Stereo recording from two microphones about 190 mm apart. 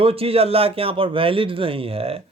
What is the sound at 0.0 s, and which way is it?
Speech, 30° right (ahead or behind).